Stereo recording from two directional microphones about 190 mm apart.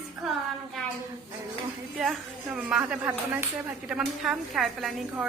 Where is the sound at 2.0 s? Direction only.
5° right (ahead or behind).